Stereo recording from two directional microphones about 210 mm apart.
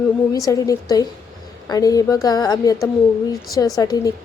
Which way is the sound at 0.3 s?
15° left (ahead or behind).